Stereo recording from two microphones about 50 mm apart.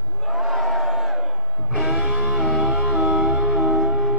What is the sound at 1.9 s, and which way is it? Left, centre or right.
Music, right.